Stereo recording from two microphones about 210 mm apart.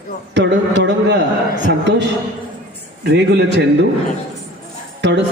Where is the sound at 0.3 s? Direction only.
55° right (ahead or behind).